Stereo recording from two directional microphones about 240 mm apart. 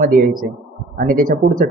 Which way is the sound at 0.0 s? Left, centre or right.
Right.